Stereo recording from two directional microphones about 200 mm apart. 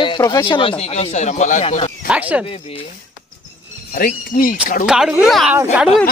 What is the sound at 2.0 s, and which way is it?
Speech, 5° right (ahead or behind).